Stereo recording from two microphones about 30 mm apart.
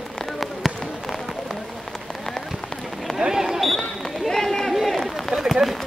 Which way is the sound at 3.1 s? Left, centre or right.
Centre.